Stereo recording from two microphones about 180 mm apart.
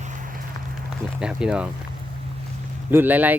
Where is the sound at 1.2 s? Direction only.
5° right (ahead or behind).